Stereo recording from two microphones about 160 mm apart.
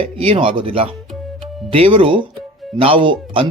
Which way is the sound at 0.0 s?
35° right (ahead or behind).